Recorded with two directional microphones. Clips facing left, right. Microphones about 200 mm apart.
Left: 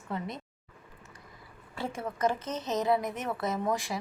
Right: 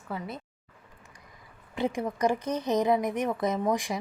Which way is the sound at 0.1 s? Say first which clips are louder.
Even; 5° right (ahead or behind).